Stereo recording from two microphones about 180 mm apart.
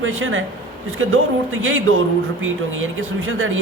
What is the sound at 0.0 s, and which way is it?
Speech, 90° right.